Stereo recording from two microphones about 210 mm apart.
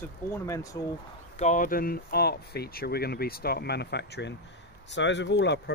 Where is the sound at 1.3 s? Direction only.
35° left (ahead or behind).